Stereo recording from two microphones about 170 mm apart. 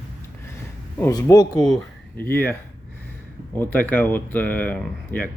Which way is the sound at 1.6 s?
10° left (ahead or behind).